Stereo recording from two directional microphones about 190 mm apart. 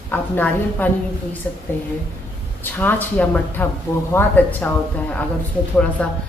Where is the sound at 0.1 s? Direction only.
10° left (ahead or behind).